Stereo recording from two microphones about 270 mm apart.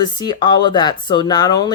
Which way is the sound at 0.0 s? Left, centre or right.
Centre.